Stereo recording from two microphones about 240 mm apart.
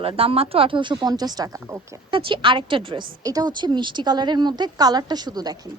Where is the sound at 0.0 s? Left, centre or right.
Right.